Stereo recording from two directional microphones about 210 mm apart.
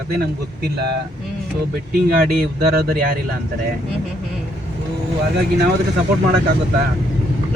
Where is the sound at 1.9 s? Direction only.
45° right (ahead or behind).